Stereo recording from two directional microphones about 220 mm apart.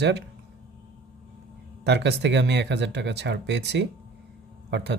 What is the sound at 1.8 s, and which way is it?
Speech, 50° right (ahead or behind).